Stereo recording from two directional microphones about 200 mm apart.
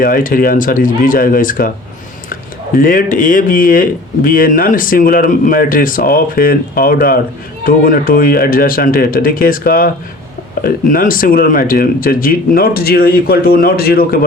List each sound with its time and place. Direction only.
0.0 s speech: 45° left (ahead or behind)
2.7 s speech: 45° left (ahead or behind)